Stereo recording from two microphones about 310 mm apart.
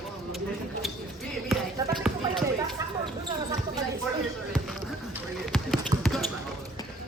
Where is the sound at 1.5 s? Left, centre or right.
Centre.